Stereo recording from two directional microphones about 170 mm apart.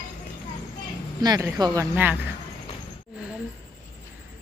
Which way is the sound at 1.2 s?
25° right (ahead or behind).